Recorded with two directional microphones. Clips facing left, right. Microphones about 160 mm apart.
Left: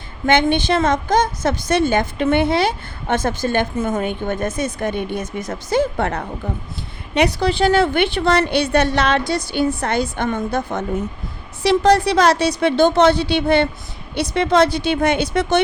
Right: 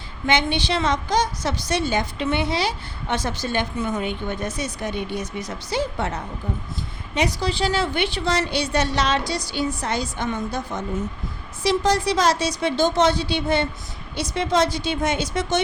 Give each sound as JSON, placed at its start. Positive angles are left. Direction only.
{"t": 0.3, "sound": "a woman's voice", "side_deg": 50}